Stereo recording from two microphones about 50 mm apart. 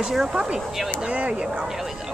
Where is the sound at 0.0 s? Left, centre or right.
Centre.